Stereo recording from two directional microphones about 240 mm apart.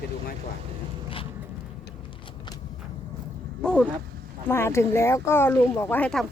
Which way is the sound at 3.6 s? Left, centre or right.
Centre.